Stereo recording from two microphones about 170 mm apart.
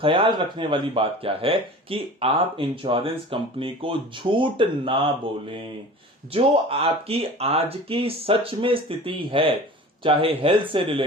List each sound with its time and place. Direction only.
0.0 s speech: 30° right (ahead or behind)
6.3 s speech: 35° right (ahead or behind)